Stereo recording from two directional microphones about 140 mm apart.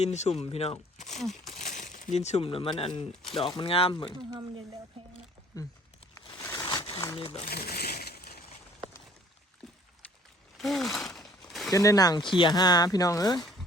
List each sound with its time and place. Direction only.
0.0 s speech: 55° left (ahead or behind)
1.6 s a sound: 60° left (ahead or behind)
2.1 s speech: 50° left (ahead or behind)
4.1 s speech: 30° right (ahead or behind)
5.5 s speech: 25° left (ahead or behind)
6.7 s a sound: 35° left (ahead or behind)
7.2 s speech: 40° left (ahead or behind)
7.5 s crushing: 90° left
10.6 s a sound: centre (ahead or behind)
11.7 s speech: 25° left (ahead or behind)